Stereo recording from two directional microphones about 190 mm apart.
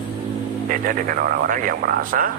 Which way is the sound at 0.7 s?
45° right (ahead or behind).